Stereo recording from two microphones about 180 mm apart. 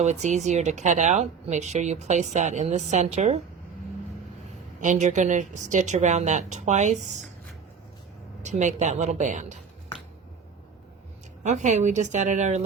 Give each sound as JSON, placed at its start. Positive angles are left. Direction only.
{"t": 0.0, "sound": "speech", "side_deg": -40}
{"t": 4.8, "sound": "speech", "side_deg": -45}
{"t": 8.4, "sound": "speech", "side_deg": -45}
{"t": 11.4, "sound": "speech", "side_deg": -40}